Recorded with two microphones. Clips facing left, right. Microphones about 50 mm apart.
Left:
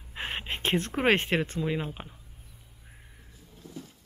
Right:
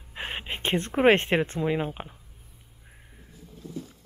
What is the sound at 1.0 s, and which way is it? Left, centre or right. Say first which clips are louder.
Speech: right 5 dB; right.